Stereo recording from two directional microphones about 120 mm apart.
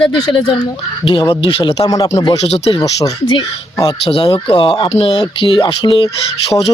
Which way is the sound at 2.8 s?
40° left (ahead or behind).